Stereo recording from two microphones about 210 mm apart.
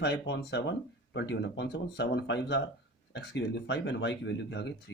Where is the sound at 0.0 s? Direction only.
60° left (ahead or behind).